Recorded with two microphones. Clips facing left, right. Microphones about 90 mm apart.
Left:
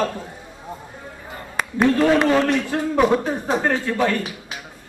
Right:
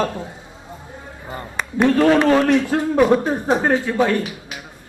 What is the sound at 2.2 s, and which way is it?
Speech, 15° right (ahead or behind).